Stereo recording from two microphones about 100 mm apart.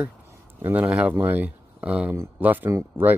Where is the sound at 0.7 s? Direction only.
15° right (ahead or behind).